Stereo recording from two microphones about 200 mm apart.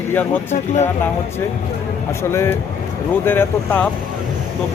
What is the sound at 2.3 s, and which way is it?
Speech, 15° left (ahead or behind).